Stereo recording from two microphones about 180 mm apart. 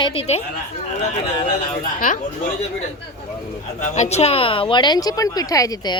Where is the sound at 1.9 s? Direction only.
45° left (ahead or behind).